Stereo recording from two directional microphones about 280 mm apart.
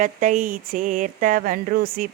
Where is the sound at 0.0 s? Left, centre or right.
Right.